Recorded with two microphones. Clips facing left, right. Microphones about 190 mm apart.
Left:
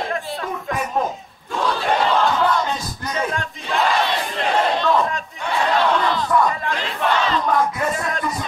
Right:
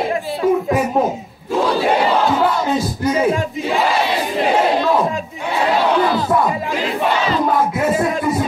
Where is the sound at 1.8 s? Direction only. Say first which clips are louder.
Right 3 dB; 10° right (ahead or behind).